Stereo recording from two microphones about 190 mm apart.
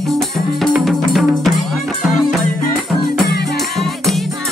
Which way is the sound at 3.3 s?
55° left (ahead or behind).